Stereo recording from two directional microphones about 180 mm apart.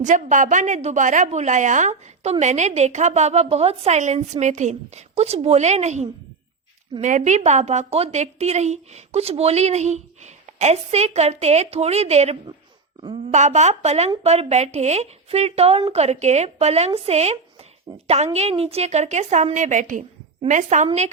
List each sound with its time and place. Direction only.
0.0 s a woman's voice: 45° right (ahead or behind)
17.9 s a woman's voice: 20° right (ahead or behind)
18.3 s a woman's voice: 35° right (ahead or behind)